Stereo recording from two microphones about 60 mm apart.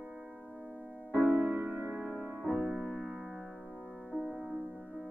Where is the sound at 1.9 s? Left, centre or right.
Right.